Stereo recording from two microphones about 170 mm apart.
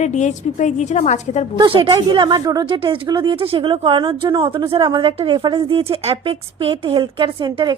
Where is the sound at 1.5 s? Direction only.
30° right (ahead or behind).